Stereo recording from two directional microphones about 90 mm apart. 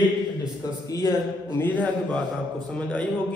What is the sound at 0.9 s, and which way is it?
Speech, 50° right (ahead or behind).